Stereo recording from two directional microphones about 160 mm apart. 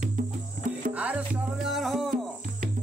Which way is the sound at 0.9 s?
10° right (ahead or behind).